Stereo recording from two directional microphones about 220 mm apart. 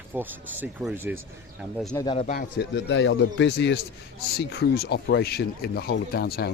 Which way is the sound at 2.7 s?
55° left (ahead or behind).